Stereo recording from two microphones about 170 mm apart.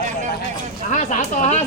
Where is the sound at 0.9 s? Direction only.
45° left (ahead or behind).